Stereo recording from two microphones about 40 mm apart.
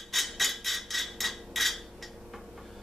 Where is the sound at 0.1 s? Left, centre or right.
Centre.